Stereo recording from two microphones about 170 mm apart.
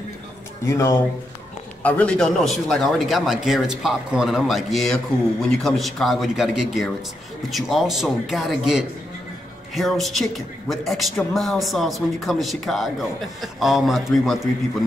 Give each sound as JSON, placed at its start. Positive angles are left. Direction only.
{"t": 0.7, "sound": "a man's voice", "side_deg": 15}